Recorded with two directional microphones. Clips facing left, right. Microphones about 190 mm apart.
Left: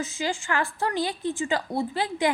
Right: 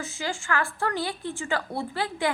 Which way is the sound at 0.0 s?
20° left (ahead or behind).